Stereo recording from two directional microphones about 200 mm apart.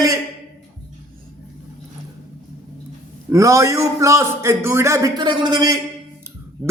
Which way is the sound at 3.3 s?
15° right (ahead or behind).